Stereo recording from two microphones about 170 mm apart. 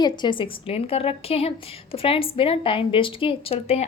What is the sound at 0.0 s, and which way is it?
A woman's voice, 25° left (ahead or behind).